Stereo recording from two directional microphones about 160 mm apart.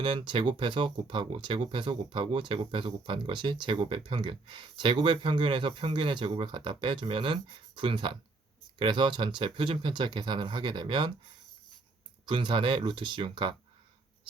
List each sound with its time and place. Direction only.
0.0 s speech: 30° right (ahead or behind)
12.2 s speech: 30° right (ahead or behind)